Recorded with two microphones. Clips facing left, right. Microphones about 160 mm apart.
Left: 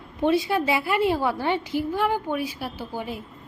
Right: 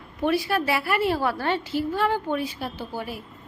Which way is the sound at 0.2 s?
20° left (ahead or behind).